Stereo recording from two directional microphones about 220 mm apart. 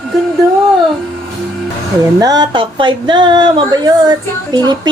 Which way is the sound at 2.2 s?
20° right (ahead or behind).